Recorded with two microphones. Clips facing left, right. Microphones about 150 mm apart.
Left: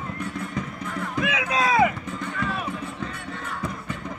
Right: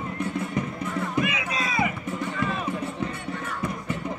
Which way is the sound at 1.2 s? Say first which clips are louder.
Left 4 dB; 90° left.